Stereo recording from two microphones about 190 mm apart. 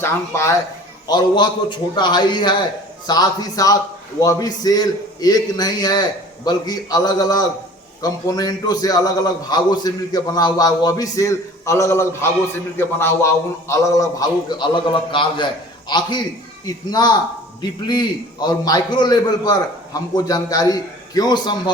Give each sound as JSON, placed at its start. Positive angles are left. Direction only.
{"t": 0.0, "sound": "a man's voice", "side_deg": 15}